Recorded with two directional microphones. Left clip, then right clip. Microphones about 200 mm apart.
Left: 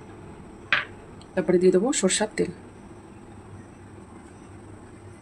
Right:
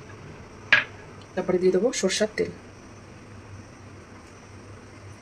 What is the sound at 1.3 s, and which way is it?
Speech, 70° left (ahead or behind).